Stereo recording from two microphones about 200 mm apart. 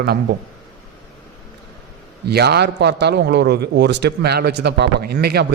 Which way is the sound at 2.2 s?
55° right (ahead or behind).